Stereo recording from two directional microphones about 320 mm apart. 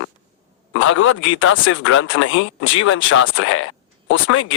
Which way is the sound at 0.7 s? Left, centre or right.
Left.